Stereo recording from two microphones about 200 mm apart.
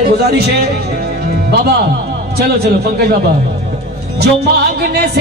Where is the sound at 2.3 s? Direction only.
55° right (ahead or behind).